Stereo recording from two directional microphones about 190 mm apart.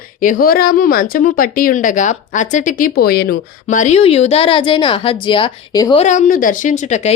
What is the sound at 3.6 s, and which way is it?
Speech, 40° left (ahead or behind).